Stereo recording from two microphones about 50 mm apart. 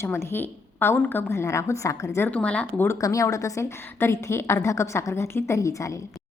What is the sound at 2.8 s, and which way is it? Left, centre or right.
Speech, left.